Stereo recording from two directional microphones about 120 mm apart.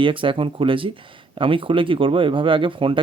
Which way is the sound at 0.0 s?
45° right (ahead or behind).